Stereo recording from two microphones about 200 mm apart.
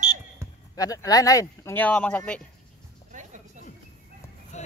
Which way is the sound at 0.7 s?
20° left (ahead or behind).